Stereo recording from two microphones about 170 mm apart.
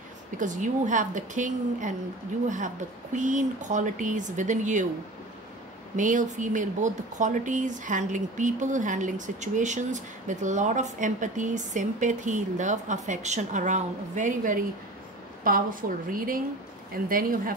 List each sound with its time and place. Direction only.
0.4 s speech: 50° right (ahead or behind)
5.9 s a woman's voice: 50° right (ahead or behind)